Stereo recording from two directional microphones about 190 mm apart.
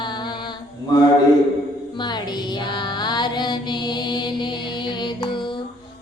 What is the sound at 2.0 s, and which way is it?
Music, 20° left (ahead or behind).